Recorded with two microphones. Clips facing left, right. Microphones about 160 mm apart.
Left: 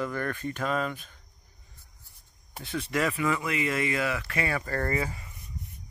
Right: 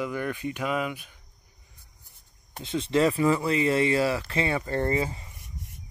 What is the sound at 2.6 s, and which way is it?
Speech, 20° right (ahead or behind).